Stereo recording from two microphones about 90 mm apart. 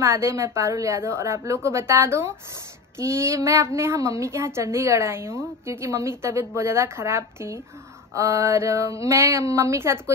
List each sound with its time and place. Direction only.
0.0 s a woman's voice: 30° right (ahead or behind)